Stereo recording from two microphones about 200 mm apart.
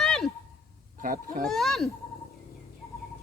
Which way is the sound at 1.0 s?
45° right (ahead or behind).